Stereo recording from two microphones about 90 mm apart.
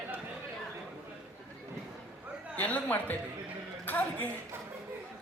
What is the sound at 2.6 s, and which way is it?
A man's voice, 15° left (ahead or behind).